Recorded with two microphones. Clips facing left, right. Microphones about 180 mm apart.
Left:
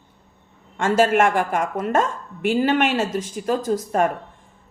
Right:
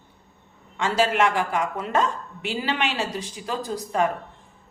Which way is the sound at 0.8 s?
50° left (ahead or behind).